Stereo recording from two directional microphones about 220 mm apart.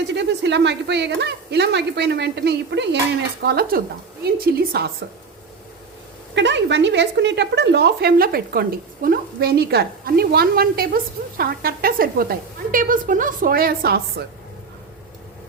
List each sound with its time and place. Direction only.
0.1 s speech: 50° right (ahead or behind)
6.3 s speech: 55° right (ahead or behind)